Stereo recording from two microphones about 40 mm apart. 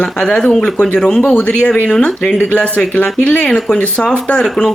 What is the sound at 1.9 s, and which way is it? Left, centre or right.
Speech, centre.